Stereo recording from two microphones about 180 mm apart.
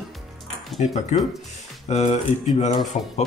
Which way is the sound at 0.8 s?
40° left (ahead or behind).